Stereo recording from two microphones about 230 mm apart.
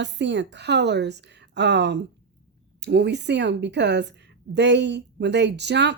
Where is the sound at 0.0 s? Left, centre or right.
Right.